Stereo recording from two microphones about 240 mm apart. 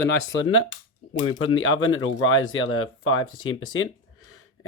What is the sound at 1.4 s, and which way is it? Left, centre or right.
Speech, left.